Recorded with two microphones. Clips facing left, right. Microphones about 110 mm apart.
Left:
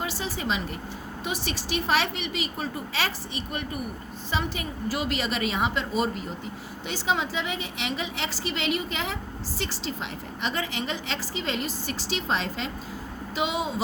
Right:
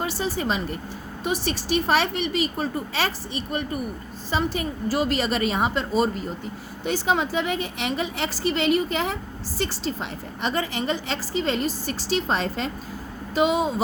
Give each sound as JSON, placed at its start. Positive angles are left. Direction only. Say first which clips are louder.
{"t": 0.0, "sound": "a woman's voice", "louder": "right 5 dB", "side_deg": -40}